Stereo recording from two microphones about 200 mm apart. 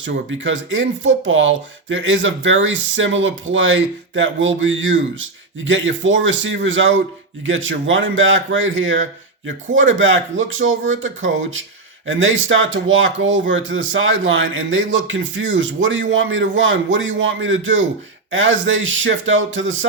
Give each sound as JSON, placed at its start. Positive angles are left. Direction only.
{"t": 0.0, "sound": "speech", "side_deg": -70}